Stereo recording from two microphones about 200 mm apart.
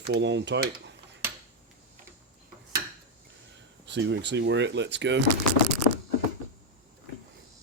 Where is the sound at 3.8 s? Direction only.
60° right (ahead or behind).